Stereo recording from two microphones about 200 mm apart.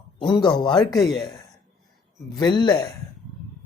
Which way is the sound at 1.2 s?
20° left (ahead or behind).